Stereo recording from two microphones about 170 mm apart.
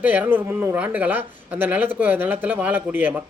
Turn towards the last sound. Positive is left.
turn(degrees=-10)  # may be behind; listen again after turning